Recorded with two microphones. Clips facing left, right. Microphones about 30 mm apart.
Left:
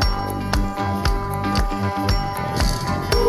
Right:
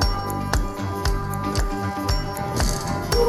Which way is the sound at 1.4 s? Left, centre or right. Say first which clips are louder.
Left 3 dB; left.